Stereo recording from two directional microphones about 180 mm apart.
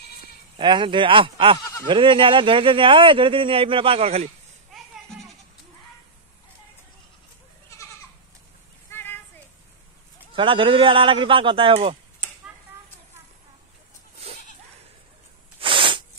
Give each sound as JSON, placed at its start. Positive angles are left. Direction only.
{"t": 0.6, "sound": "speech", "side_deg": -25}
{"t": 8.9, "sound": "clip-clop", "side_deg": 10}
{"t": 10.3, "sound": "speech", "side_deg": -30}
{"t": 14.2, "sound": "goat", "side_deg": -35}
{"t": 15.6, "sound": "a sound", "side_deg": -30}